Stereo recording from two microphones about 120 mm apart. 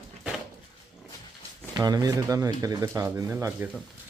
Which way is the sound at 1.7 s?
35° right (ahead or behind).